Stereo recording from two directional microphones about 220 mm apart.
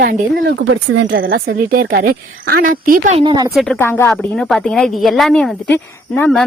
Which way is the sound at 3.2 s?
20° right (ahead or behind).